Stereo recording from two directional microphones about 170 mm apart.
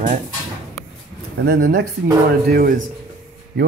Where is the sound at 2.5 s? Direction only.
55° right (ahead or behind).